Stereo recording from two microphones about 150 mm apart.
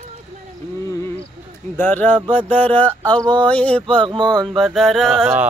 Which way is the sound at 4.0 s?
30° right (ahead or behind).